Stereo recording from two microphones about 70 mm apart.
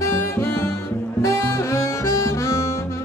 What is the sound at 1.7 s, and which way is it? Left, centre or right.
Harmonica, left.